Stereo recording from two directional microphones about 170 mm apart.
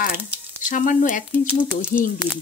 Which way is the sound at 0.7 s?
50° left (ahead or behind).